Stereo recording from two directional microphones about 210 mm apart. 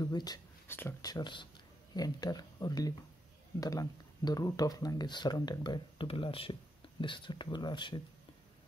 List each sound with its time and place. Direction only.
0.0 s speech: 20° left (ahead or behind)